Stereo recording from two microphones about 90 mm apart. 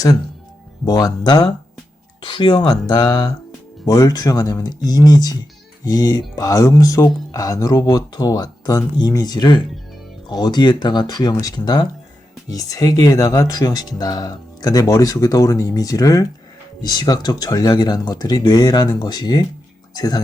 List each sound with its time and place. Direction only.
0.9 s speech: 45° left (ahead or behind)
2.2 s speech: 65° left (ahead or behind)
2.8 s speech: 45° left (ahead or behind)
12.5 s speech: 40° left (ahead or behind)